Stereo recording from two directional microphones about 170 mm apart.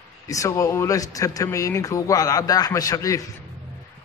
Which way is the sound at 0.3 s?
20° left (ahead or behind).